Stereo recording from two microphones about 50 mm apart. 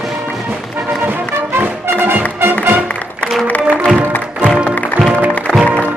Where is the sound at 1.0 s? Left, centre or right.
Right.